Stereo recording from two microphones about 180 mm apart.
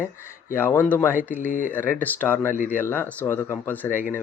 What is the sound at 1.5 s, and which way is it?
Speech, 50° left (ahead or behind).